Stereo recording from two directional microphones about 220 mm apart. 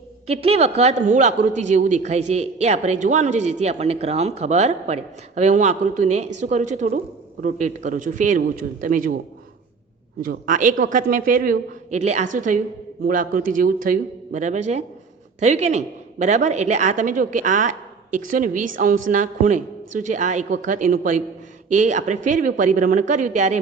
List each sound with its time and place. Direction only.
0.3 s a man's voice: 30° right (ahead or behind)
10.2 s a man's voice: 40° right (ahead or behind)